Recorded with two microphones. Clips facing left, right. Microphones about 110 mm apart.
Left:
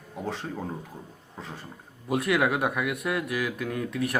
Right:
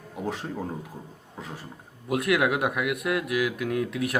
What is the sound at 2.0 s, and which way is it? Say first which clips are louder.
A man's voice: right 1 dB; centre (ahead or behind).